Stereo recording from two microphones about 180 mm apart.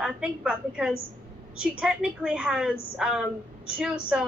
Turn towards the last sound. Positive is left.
turn(degrees=-5)  # may be behind; listen again after turning